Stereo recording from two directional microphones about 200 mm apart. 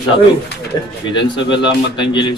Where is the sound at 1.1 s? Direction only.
25° left (ahead or behind).